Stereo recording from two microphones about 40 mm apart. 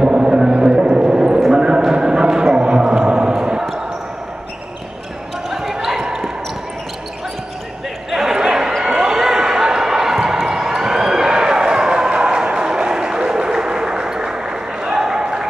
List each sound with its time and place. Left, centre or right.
0.0 s a sound: right
1.5 s clip-clop: centre
3.3 s basketball bounce: centre
5.5 s basketball bounce: centre
8.1 s basketball bounce: centre
10.6 s a sound: centre